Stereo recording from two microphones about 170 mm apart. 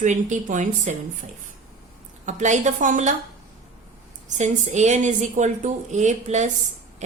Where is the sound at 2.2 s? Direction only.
45° right (ahead or behind).